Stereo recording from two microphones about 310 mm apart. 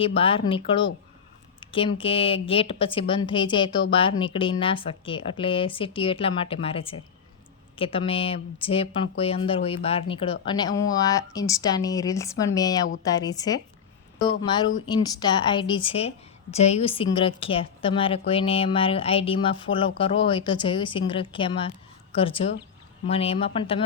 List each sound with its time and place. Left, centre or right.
0.0 s a woman's voice: centre
1.6 s a sound: centre
2.0 s a woman's voice: centre